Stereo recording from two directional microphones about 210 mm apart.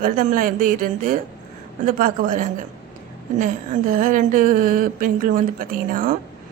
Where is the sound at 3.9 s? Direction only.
40° right (ahead or behind).